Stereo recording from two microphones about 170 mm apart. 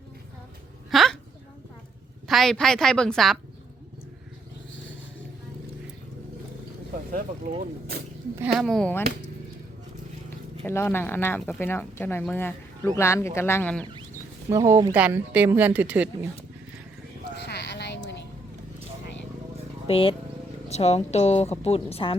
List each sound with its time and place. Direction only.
0.9 s a sound: centre (ahead or behind)
2.2 s a woman's voice: centre (ahead or behind)
7.1 s speech: 55° right (ahead or behind)
8.4 s a woman's voice: centre (ahead or behind)
10.2 s speech: 15° left (ahead or behind)
14.5 s a woman's voice: 15° right (ahead or behind)
14.9 s a woman's voice: 10° right (ahead or behind)
17.4 s music: 80° left
19.9 s a woman's voice: 30° left (ahead or behind)